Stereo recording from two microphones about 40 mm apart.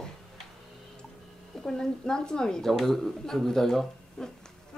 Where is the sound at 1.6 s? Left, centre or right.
Centre.